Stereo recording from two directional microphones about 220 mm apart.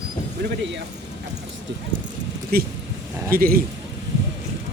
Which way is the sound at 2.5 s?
45° right (ahead or behind).